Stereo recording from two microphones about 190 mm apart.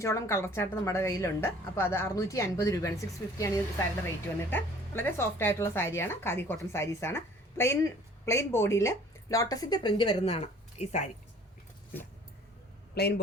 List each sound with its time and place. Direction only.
0.0 s speech: 15° left (ahead or behind); by 11.1 s 35° left (ahead or behind)
12.9 s speech: 60° left (ahead or behind)